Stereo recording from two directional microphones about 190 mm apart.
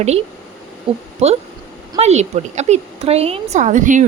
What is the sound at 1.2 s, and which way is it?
Speech, 35° right (ahead or behind).